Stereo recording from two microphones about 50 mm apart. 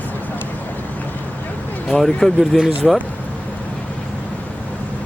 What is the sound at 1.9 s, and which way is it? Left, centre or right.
Speech, centre.